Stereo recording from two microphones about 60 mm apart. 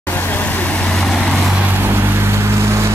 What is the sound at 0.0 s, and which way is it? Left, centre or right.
Vehicle, left.